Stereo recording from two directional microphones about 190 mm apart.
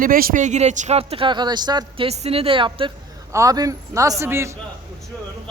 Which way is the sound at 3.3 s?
15° right (ahead or behind).